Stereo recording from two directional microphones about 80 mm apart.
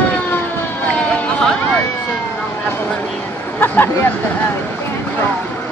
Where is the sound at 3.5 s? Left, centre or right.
Left.